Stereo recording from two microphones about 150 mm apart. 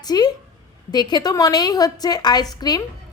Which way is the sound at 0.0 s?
25° left (ahead or behind).